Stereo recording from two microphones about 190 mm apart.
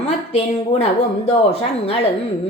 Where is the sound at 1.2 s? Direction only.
30° left (ahead or behind).